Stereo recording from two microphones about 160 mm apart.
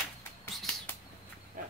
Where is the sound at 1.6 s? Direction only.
60° right (ahead or behind).